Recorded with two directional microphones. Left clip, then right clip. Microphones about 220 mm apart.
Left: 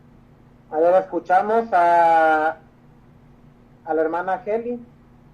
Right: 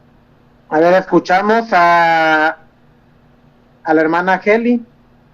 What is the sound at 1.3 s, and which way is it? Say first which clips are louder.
Speech: right 3 dB; 20° right (ahead or behind).